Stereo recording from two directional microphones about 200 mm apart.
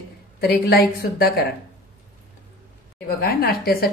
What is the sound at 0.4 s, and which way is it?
Speech, 50° left (ahead or behind).